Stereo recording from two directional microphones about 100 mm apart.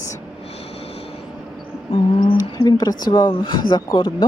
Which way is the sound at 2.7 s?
45° left (ahead or behind).